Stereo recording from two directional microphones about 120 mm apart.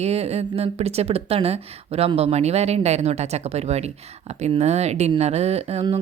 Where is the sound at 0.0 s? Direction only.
60° right (ahead or behind).